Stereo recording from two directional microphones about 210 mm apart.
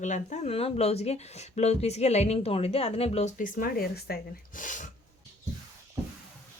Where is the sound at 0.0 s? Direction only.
35° left (ahead or behind).